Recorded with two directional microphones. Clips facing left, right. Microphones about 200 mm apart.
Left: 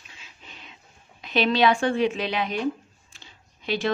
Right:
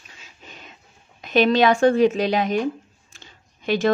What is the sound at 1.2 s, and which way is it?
Speech, 45° right (ahead or behind).